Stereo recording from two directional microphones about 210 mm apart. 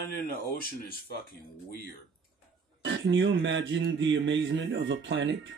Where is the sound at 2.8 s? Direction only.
60° right (ahead or behind).